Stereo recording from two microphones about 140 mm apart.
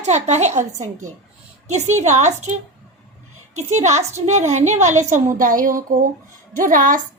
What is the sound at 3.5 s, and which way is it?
A woman's voice, 55° right (ahead or behind).